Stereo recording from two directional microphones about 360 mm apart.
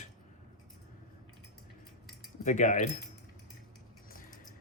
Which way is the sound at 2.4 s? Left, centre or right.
Centre.